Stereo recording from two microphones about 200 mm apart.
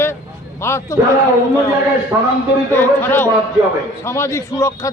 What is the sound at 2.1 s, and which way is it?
Speech, 10° right (ahead or behind).